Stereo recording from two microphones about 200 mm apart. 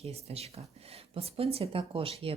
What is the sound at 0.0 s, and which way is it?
Speech, 30° right (ahead or behind).